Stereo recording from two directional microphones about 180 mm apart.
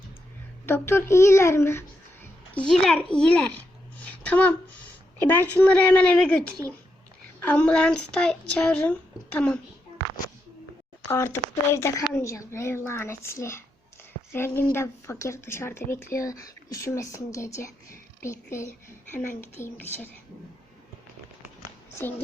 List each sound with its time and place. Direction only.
0.6 s speech: 15° left (ahead or behind)
2.6 s speech: 5° left (ahead or behind)
4.0 s a sound: 10° left (ahead or behind)
5.3 s speech: 10° left (ahead or behind)
11.1 s speech: 15° left (ahead or behind)